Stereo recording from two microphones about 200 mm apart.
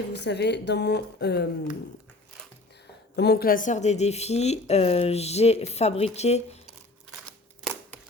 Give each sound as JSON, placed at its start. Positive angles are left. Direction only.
{"t": 0.1, "sound": "speech", "side_deg": 60}
{"t": 3.2, "sound": "speech", "side_deg": 50}